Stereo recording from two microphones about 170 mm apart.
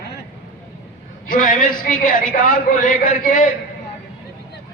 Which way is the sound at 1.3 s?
50° left (ahead or behind).